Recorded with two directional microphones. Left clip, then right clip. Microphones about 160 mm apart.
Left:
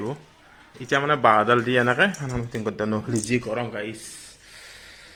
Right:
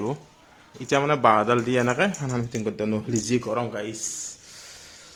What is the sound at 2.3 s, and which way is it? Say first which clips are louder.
Speech: right 2 dB; 55° right (ahead or behind).